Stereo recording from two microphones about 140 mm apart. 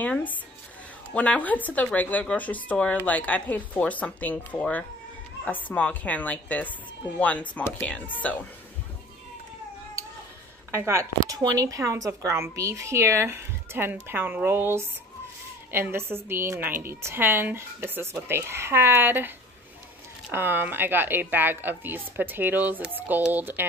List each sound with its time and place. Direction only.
0.0 s speech: 10° left (ahead or behind)
10.7 s a woman's voice: 20° right (ahead or behind)